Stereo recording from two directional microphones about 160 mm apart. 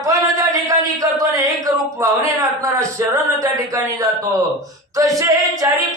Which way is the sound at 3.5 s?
20° right (ahead or behind).